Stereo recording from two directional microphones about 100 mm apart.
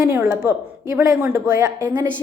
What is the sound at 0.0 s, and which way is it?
Speech, 25° right (ahead or behind).